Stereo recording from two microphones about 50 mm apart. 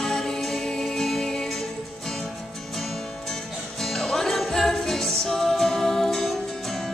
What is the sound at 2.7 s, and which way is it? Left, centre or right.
Music, centre.